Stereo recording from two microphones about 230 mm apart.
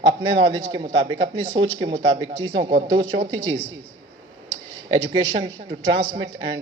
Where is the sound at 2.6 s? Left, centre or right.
Right.